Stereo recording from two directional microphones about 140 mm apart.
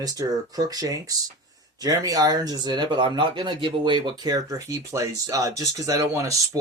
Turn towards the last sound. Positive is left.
turn(degrees=-25)  # may be behind; listen again after turning